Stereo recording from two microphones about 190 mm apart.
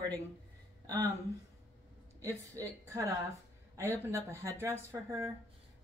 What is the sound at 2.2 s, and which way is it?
Speech, 15° right (ahead or behind).